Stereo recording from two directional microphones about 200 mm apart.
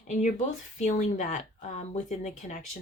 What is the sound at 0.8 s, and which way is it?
Speech, 35° left (ahead or behind).